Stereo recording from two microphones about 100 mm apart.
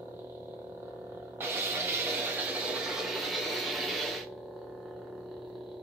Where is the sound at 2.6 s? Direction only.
5° right (ahead or behind).